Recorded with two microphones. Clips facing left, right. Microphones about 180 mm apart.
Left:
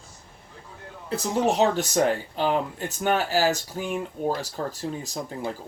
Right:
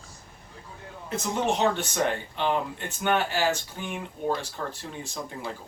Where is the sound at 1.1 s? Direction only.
35° left (ahead or behind).